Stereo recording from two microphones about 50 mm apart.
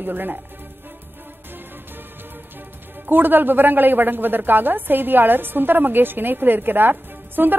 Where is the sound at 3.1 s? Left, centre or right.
Right.